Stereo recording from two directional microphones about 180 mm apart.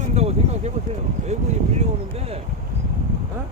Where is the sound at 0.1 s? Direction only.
35° right (ahead or behind).